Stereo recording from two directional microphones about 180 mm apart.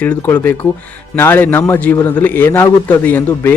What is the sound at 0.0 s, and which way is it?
Speech, 10° left (ahead or behind).